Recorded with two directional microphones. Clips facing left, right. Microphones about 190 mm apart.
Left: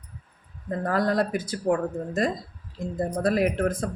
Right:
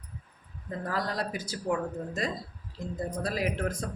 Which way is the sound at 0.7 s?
55° left (ahead or behind).